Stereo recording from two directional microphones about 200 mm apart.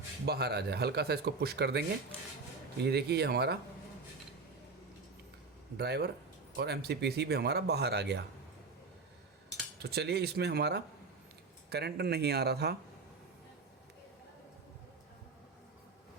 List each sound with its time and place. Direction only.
0.3 s speech: 55° right (ahead or behind)
2.8 s speech: 55° right (ahead or behind)
5.7 s speech: 55° right (ahead or behind)
9.8 s speech: 55° right (ahead or behind)